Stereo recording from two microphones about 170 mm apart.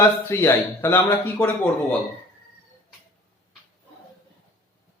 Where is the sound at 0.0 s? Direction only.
15° left (ahead or behind).